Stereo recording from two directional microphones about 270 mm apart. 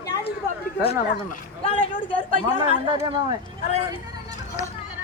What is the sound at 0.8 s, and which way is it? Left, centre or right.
Speech, left.